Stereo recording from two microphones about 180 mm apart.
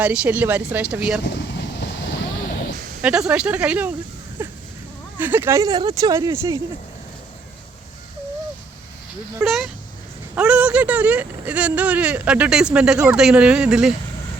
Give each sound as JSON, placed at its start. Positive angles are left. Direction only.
{"t": 0.0, "sound": "speech", "side_deg": -5}
{"t": 1.2, "sound": "vehicle", "side_deg": 75}
{"t": 3.0, "sound": "speech", "side_deg": -5}
{"t": 5.1, "sound": "speech", "side_deg": -10}
{"t": 9.4, "sound": "speech", "side_deg": 0}